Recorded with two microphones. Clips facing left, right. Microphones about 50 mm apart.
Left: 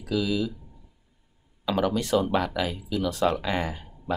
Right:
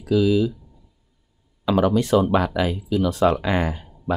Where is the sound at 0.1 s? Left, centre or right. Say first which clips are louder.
Right 8 dB; right.